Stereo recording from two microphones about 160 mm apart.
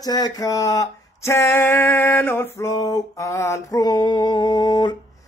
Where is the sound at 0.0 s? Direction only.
25° left (ahead or behind).